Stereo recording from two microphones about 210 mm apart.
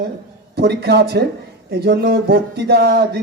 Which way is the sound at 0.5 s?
50° right (ahead or behind).